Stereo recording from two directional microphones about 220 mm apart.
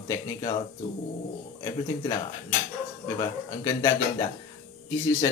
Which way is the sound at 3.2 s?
20° left (ahead or behind).